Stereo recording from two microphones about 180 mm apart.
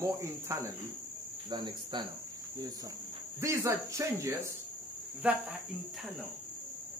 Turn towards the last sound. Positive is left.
turn(degrees=-5)  # may be behind; listen again after turning